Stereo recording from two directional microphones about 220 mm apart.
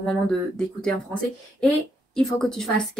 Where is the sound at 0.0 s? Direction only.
5° left (ahead or behind).